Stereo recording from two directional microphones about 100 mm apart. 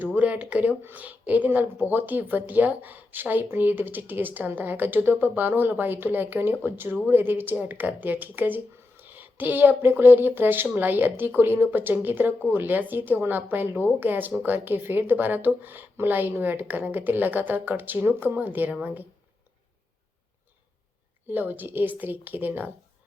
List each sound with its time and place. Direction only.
0.0 s speech: 15° right (ahead or behind)
21.2 s speech: 20° right (ahead or behind)